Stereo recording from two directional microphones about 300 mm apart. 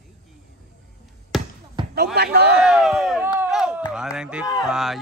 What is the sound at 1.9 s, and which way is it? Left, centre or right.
Speech, right.